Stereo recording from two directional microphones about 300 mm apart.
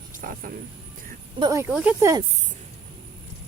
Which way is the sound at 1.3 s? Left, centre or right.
Centre.